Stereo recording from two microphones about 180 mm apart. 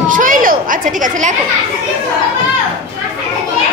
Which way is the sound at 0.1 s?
50° right (ahead or behind).